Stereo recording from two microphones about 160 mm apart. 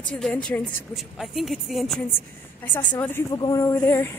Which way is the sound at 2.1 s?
15° left (ahead or behind).